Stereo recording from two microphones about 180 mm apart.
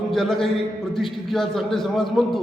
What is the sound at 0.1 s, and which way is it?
A man's voice, centre (ahead or behind).